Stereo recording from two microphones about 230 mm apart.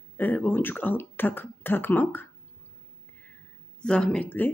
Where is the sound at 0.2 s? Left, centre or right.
Centre.